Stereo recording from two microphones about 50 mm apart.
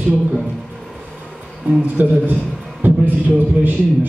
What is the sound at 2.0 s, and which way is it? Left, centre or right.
Speech, right.